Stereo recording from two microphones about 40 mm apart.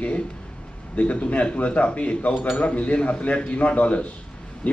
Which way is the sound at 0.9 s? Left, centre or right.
Left.